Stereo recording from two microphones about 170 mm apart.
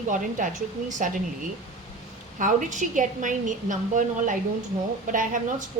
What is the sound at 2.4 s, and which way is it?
A woman's voice, 45° right (ahead or behind).